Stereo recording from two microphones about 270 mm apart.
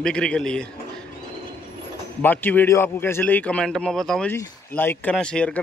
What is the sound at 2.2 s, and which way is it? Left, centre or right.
A man's voice, centre.